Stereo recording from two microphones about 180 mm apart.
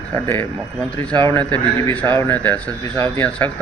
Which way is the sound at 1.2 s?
10° left (ahead or behind).